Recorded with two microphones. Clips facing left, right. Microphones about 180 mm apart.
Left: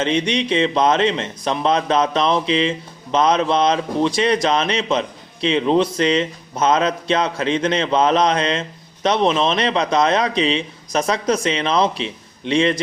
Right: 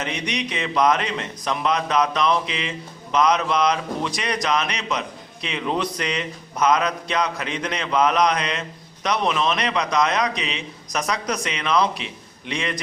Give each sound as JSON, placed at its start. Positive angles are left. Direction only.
{"t": 0.0, "sound": "speech", "side_deg": 25}